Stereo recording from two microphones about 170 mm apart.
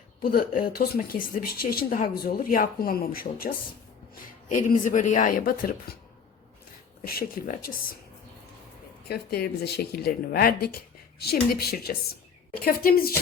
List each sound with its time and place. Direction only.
0.2 s speech: 60° left (ahead or behind)
4.4 s speech: 50° left (ahead or behind)
7.0 s speech: 60° left (ahead or behind)
9.0 s speech: 65° left (ahead or behind)